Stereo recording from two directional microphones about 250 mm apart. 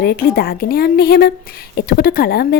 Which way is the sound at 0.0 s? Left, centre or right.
Left.